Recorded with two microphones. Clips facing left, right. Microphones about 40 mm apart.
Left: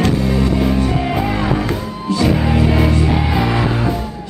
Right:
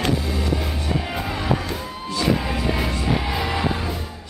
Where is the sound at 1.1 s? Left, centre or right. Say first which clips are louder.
Left 6 dB; left.